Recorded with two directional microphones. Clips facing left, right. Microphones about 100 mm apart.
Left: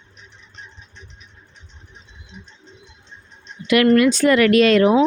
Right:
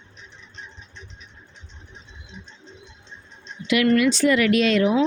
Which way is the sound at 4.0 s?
50° left (ahead or behind).